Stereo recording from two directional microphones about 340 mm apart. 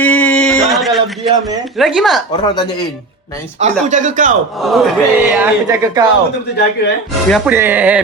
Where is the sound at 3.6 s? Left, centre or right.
Right.